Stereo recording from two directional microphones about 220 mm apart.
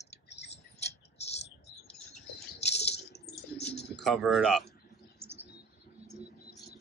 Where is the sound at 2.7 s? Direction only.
50° left (ahead or behind).